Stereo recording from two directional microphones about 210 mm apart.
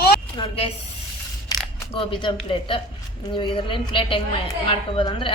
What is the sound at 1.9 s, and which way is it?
Speech, 25° left (ahead or behind).